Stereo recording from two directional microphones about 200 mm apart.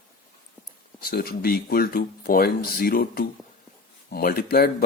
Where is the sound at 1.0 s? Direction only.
50° left (ahead or behind).